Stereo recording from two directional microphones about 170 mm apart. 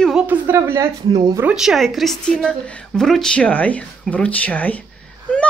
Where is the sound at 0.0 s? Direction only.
5° right (ahead or behind).